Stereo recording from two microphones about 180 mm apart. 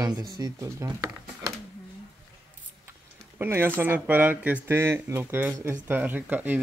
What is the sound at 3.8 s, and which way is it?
Speech, 10° right (ahead or behind).